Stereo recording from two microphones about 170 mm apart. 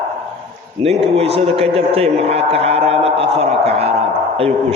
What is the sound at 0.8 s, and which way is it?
A man's voice, 35° right (ahead or behind).